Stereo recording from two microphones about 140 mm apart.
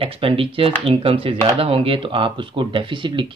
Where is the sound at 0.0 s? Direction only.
40° right (ahead or behind).